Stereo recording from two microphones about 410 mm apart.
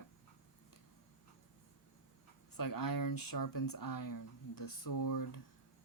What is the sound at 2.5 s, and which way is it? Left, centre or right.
Speech, left.